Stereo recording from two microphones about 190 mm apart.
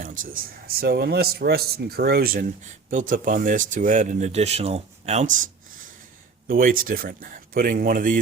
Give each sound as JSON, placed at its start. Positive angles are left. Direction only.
{"t": 0.0, "sound": "speech", "side_deg": -45}
{"t": 6.5, "sound": "speech", "side_deg": -45}